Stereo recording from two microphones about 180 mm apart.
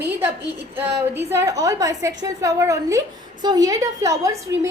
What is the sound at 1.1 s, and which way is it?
A woman's voice, 15° right (ahead or behind).